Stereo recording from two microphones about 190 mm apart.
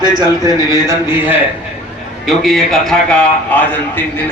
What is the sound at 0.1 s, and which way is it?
A man's voice, 20° right (ahead or behind).